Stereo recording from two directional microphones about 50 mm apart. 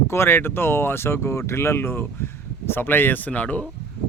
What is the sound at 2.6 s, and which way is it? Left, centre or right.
Speech, left.